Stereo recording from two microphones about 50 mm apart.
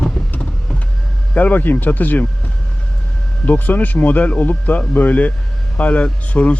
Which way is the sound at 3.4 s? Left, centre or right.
Left.